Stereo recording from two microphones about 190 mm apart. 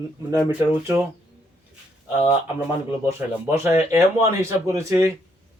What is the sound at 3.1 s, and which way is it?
Speech, 15° right (ahead or behind).